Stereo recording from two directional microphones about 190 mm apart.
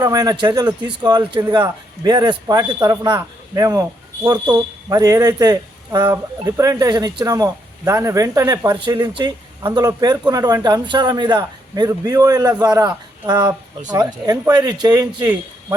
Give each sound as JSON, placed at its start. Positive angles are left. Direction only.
{"t": 0.0, "sound": "speech", "side_deg": -20}